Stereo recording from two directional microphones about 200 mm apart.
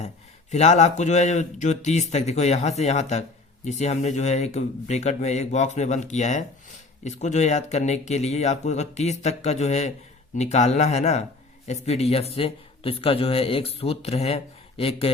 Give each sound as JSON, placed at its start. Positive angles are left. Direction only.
{"t": 0.5, "sound": "a man's voice", "side_deg": 35}